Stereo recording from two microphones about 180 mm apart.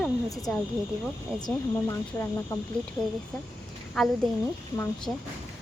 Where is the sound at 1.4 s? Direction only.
15° left (ahead or behind).